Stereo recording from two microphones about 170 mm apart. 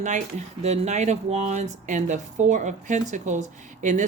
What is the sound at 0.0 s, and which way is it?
Speech, 45° right (ahead or behind).